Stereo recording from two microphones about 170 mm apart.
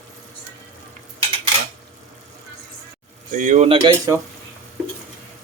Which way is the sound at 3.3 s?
45° right (ahead or behind).